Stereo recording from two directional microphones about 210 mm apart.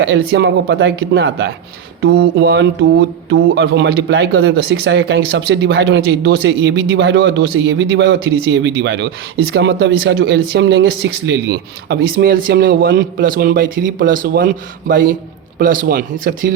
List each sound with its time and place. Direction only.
0.0 s speech: 55° right (ahead or behind)